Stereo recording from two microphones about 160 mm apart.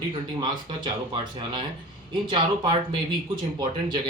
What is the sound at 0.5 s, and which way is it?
Speech, 30° right (ahead or behind).